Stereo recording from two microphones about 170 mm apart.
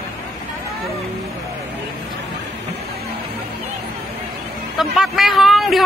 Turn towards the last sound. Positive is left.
turn(degrees=0)  # may be behind; listen again after turning